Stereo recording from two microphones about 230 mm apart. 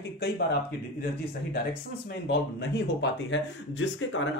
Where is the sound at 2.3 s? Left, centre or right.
Left.